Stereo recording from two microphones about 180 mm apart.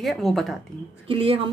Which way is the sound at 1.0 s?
30° right (ahead or behind).